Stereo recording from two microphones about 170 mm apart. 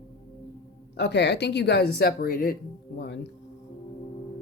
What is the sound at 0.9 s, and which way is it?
Speech, 90° left.